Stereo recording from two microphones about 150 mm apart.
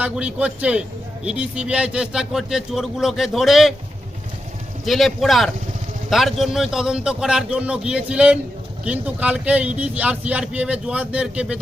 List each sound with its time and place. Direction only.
0.0 s a man's voice: 10° right (ahead or behind)
4.9 s a man's voice: centre (ahead or behind)